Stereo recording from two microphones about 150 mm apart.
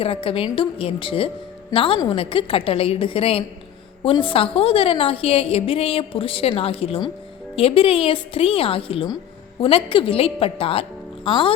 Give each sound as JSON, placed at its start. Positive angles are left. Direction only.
{"t": 0.0, "sound": "speech", "side_deg": 35}